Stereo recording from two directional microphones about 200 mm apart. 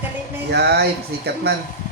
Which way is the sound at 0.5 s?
55° right (ahead or behind).